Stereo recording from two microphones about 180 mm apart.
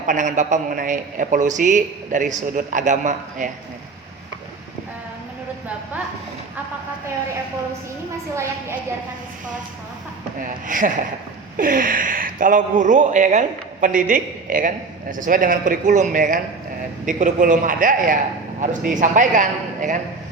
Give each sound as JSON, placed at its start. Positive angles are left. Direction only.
{"t": 0.1, "sound": "a man's voice", "side_deg": -45}
{"t": 10.7, "sound": "a man's voice", "side_deg": -45}